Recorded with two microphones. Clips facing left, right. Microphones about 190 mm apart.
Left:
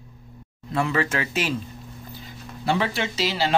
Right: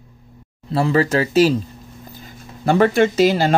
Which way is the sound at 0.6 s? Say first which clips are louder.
Right 7 dB; 35° right (ahead or behind).